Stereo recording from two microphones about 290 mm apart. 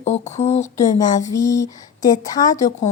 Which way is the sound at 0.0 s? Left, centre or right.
Left.